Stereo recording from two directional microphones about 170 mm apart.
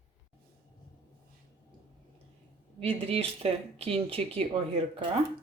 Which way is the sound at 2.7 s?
35° right (ahead or behind).